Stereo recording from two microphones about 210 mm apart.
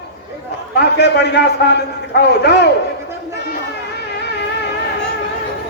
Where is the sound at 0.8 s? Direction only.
55° left (ahead or behind).